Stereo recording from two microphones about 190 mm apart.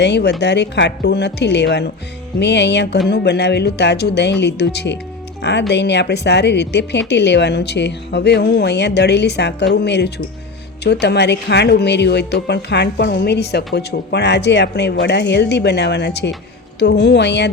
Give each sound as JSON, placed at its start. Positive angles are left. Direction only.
{"t": 0.0, "sound": "speech", "side_deg": 65}